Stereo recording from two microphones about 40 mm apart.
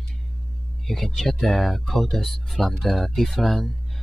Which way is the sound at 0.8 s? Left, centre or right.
Centre.